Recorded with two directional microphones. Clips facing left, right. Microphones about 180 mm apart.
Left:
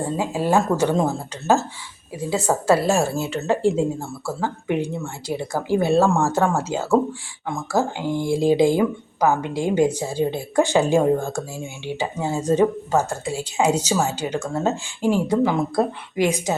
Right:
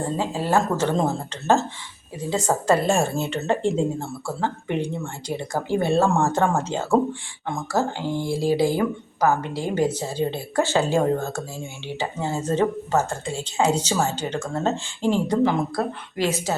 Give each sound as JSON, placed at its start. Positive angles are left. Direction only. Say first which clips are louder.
{"t": 0.2, "sound": "speech", "louder": "left 3 dB", "side_deg": 15}